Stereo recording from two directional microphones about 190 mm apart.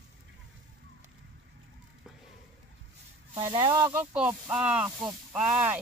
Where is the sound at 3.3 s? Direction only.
20° right (ahead or behind).